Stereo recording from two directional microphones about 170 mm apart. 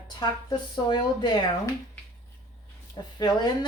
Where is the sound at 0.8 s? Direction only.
25° left (ahead or behind).